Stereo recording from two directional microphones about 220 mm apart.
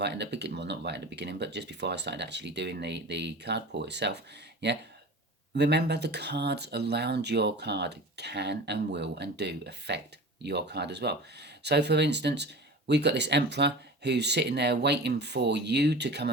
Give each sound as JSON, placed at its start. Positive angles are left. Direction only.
{"t": 0.0, "sound": "speech", "side_deg": -50}